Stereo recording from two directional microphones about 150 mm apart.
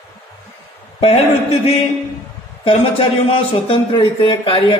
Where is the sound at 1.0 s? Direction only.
40° left (ahead or behind).